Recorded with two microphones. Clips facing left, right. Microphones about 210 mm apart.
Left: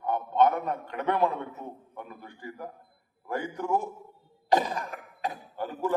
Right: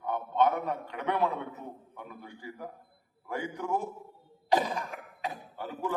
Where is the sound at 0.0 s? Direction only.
50° left (ahead or behind).